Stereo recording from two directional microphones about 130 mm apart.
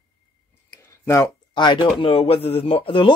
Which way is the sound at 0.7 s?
20° left (ahead or behind).